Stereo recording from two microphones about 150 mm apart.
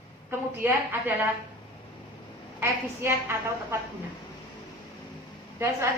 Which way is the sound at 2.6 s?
15° right (ahead or behind).